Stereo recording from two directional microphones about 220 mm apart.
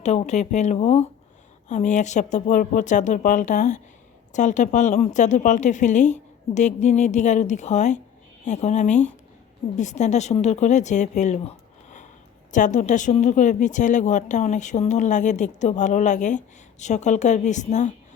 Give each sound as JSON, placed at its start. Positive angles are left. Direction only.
{"t": 0.0, "sound": "speech", "side_deg": 30}